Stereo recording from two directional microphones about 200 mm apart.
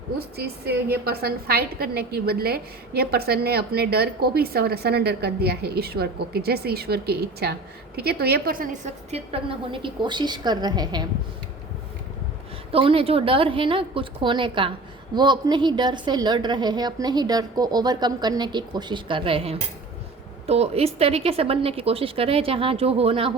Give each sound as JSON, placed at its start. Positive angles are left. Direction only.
{"t": 0.2, "sound": "a woman's voice", "side_deg": -55}
{"t": 12.7, "sound": "a woman's voice", "side_deg": -30}